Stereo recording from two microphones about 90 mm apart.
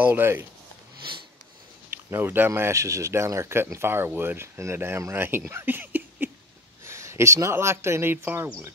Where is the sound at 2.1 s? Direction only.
25° right (ahead or behind).